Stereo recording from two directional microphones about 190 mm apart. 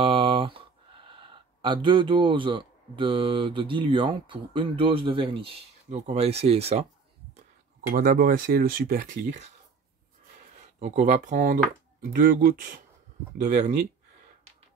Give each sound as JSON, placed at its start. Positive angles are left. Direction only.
{"t": 0.0, "sound": "speech", "side_deg": -25}
{"t": 7.9, "sound": "speech", "side_deg": -50}
{"t": 10.8, "sound": "speech", "side_deg": -35}